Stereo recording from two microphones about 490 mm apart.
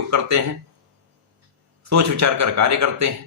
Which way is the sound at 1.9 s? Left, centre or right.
Right.